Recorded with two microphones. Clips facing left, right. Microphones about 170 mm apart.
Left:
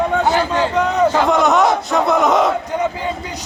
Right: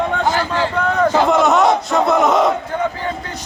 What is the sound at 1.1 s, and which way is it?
Battle cry, centre (ahead or behind).